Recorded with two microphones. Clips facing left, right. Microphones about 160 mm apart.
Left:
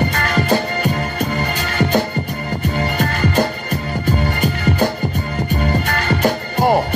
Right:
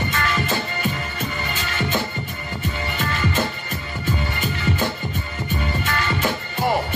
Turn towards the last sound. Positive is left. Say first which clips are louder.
# left 6 dB
turn(degrees=45)  # may be behind; listen again after turning